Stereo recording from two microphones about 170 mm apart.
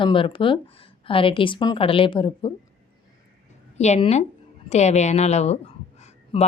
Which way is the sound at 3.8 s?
40° left (ahead or behind).